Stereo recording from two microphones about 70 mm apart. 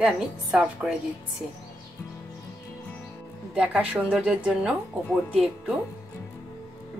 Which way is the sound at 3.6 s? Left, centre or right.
Centre.